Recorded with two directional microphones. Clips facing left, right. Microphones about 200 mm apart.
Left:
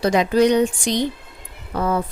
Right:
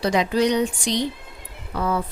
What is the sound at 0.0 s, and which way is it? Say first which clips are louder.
Speech: left 4 dB; 50° left (ahead or behind).